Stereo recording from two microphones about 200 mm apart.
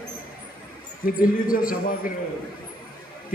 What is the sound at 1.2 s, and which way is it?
Speech, 45° left (ahead or behind).